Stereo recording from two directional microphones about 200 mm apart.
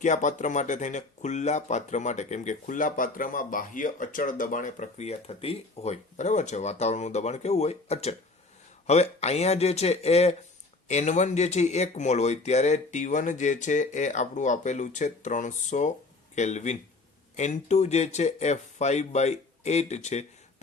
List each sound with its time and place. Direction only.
0.0 s speech: 40° left (ahead or behind)